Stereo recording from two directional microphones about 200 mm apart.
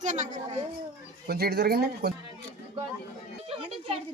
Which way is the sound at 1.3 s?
55° right (ahead or behind).